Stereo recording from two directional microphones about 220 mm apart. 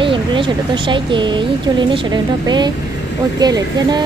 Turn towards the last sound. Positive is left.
turn(degrees=-15)  # may be behind; listen again after turning